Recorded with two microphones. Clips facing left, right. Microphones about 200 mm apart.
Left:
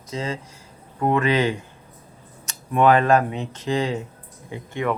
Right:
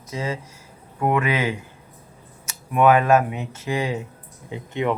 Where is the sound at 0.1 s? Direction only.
10° right (ahead or behind).